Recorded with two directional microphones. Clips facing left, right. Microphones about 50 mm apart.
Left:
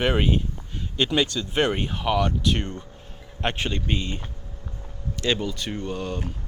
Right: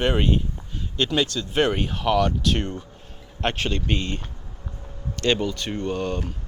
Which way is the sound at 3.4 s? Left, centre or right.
Centre.